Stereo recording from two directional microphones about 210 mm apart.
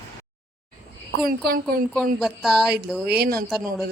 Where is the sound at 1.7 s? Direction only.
45° right (ahead or behind).